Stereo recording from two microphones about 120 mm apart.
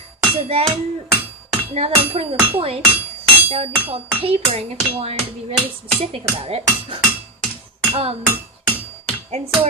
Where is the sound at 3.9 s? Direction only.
55° right (ahead or behind).